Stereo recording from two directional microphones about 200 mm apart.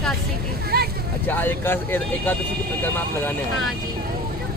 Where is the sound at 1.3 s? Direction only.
10° left (ahead or behind).